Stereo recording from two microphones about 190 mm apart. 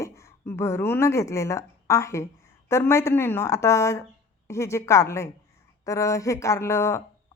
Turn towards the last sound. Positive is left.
turn(degrees=15)  # may be behind; listen again after turning